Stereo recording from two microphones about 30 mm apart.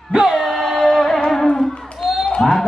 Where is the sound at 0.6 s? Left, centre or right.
Centre.